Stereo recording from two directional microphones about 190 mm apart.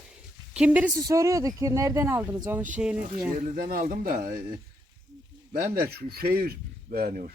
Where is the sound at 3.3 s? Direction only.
45° right (ahead or behind).